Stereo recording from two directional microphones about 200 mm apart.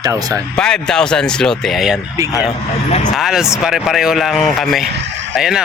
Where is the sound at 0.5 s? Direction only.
5° left (ahead or behind).